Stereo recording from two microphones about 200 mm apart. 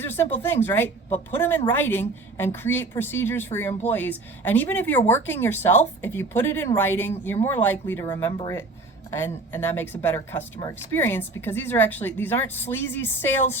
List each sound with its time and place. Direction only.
0.0 s speech: 10° left (ahead or behind)